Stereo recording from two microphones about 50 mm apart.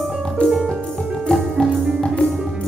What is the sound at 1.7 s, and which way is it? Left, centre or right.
Music, centre.